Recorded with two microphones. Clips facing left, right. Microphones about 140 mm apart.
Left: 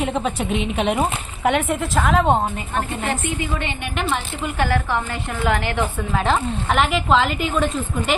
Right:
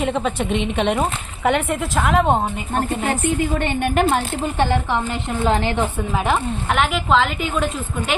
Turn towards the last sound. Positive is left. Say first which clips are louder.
# even
turn(degrees=0)  # may be behind; listen again after turning